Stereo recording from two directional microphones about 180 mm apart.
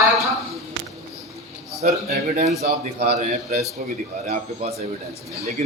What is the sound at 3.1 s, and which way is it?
Speech, 35° right (ahead or behind).